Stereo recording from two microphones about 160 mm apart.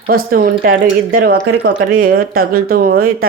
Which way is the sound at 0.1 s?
65° right (ahead or behind).